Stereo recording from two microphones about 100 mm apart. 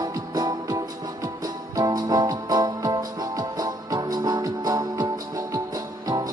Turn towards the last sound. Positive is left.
turn(degrees=-40)  # may be behind; listen again after turning